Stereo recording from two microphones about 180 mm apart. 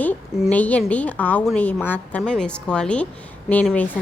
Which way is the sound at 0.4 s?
10° left (ahead or behind).